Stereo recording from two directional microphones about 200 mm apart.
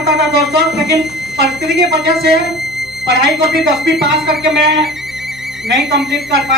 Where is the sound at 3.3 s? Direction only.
Centre (ahead or behind).